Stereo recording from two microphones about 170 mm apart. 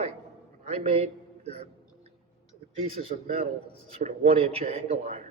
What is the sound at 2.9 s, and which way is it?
A man's voice, 40° right (ahead or behind).